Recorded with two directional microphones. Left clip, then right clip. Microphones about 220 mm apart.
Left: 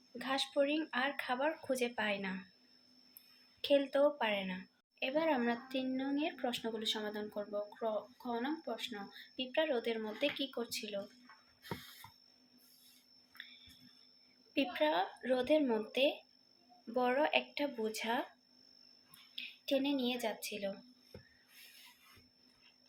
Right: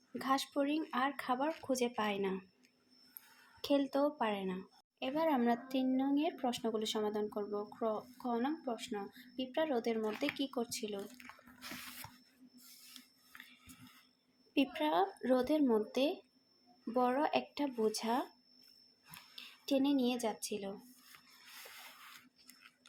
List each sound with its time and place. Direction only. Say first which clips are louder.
0.2 s a sound: right 2 dB; 45° right (ahead or behind)
0.6 s a woman's voice: left 1 dB; 45° right (ahead or behind)
3.6 s a woman's voice: left 3 dB; 40° right (ahead or behind)
14.5 s a woman's voice: even; 40° right (ahead or behind)
19.4 s speech: even; 45° right (ahead or behind)